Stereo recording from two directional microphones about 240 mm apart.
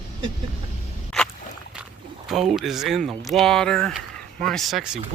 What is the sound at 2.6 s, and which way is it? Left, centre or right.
Speech, centre.